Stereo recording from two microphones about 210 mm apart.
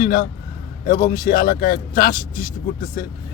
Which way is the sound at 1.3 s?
45° left (ahead or behind).